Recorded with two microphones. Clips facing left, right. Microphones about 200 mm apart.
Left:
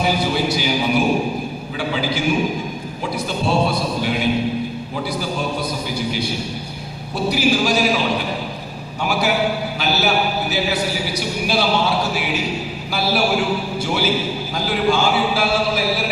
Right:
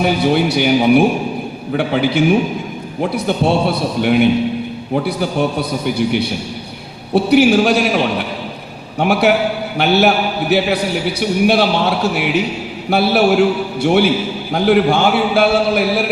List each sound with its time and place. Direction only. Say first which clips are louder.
0.0 s a man's voice: right 5 dB; 60° right (ahead or behind)